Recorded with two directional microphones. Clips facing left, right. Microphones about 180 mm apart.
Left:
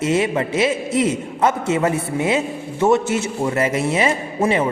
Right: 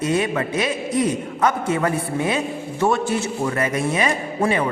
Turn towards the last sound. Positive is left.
turn(degrees=25)  # may be behind; listen again after turning